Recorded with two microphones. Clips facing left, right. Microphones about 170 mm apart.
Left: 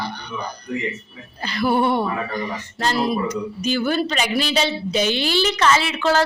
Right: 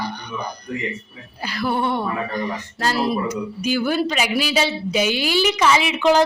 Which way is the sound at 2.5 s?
5° right (ahead or behind).